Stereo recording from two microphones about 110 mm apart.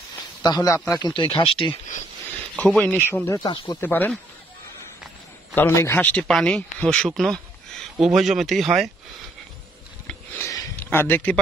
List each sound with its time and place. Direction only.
0.4 s speech: 40° left (ahead or behind); by 1.8 s 55° left (ahead or behind)
2.5 s a man's voice: 10° left (ahead or behind)
5.5 s a man's voice: 20° left (ahead or behind)
6.0 s speech: 10° left (ahead or behind)
10.4 s a sound: 30° left (ahead or behind)
10.8 s a man's voice: 20° left (ahead or behind)